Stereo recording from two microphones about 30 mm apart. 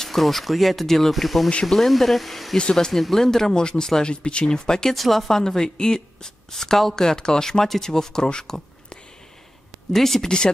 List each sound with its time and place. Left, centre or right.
0.0 s speech: centre
2.7 s speech: centre
3.5 s speech: left
4.1 s speech: left
4.5 s speech: left
4.9 s speech: centre
5.3 s speech: centre
6.5 s speech: centre
9.9 s speech: centre
10.2 s speech: left